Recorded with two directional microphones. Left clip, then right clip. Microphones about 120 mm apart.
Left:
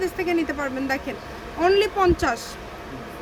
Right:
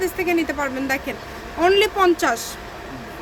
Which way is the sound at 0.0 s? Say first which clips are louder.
Right 3 dB; 15° right (ahead or behind).